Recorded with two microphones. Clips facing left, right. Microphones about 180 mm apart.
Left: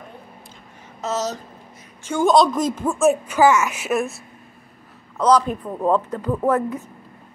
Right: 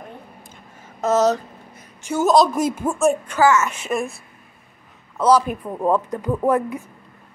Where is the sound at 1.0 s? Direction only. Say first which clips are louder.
Right 8 dB; 55° right (ahead or behind).